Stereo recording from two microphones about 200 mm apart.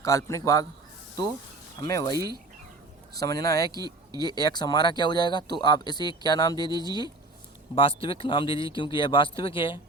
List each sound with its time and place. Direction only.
0.0 s a man's voice: 15° left (ahead or behind)
1.9 s a man's voice: 15° left (ahead or behind)
3.2 s speech: 20° left (ahead or behind)
3.8 s speech: 20° right (ahead or behind)
4.2 s speech: 20° left (ahead or behind)